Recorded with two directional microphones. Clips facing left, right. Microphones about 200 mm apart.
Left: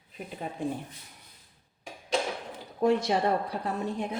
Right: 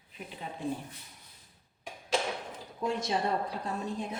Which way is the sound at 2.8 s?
65° left (ahead or behind).